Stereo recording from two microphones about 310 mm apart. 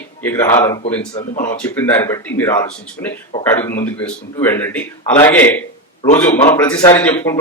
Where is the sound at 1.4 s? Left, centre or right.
Centre.